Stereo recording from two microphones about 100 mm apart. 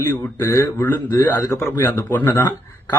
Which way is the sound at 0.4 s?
25° left (ahead or behind).